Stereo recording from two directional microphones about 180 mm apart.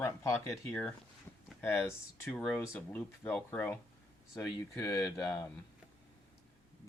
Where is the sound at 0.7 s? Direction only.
5° left (ahead or behind).